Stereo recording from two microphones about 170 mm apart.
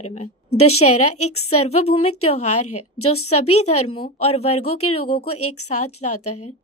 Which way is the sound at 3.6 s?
35° left (ahead or behind).